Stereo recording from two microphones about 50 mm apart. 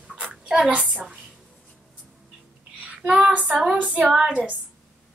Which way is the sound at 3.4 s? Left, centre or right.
Centre.